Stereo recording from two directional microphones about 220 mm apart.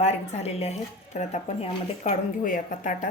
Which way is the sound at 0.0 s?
30° left (ahead or behind).